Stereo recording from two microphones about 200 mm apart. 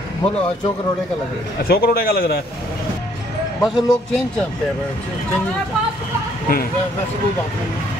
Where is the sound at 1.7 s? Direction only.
50° left (ahead or behind).